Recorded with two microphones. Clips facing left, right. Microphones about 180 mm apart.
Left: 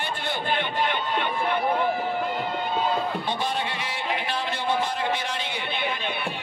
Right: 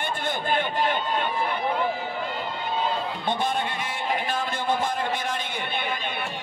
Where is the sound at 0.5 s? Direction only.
45° right (ahead or behind).